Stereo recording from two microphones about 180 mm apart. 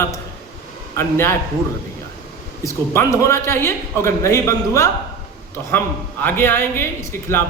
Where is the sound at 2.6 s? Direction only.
15° left (ahead or behind).